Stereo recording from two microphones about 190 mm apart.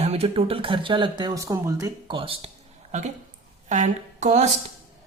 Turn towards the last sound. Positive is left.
turn(degrees=-35)  # may be behind; listen again after turning